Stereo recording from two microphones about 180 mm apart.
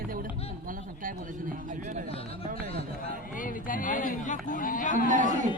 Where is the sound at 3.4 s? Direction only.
50° left (ahead or behind).